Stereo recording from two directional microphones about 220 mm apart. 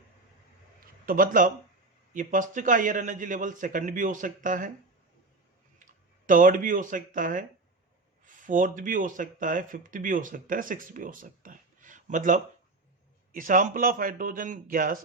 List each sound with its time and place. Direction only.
1.0 s speech: 40° right (ahead or behind)
5.8 s speech: 35° right (ahead or behind)